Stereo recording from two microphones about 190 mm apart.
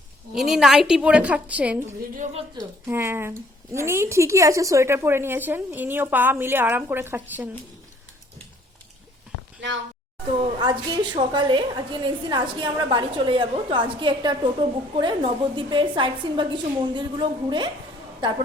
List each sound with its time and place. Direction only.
0.3 s a woman's voice: centre (ahead or behind)
9.6 s speech: 70° right (ahead or behind)
10.4 s a woman's voice: 25° right (ahead or behind)